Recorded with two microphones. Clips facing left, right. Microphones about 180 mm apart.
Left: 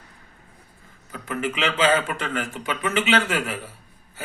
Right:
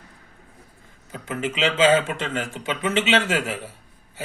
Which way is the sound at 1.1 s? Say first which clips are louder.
Even; 25° right (ahead or behind).